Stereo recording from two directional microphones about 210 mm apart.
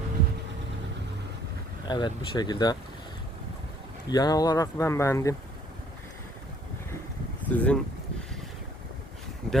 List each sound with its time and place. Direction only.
1.9 s speech: 20° left (ahead or behind)
4.1 s speech: 20° left (ahead or behind)
7.5 s speech: 5° left (ahead or behind)
9.5 s speech: 5° left (ahead or behind)